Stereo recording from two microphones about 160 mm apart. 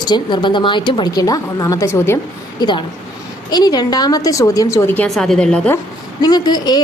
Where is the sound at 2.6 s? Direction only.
30° left (ahead or behind); by 5.7 s 5° left (ahead or behind).